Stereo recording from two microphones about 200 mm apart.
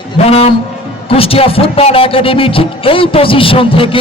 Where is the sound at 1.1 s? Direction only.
30° left (ahead or behind).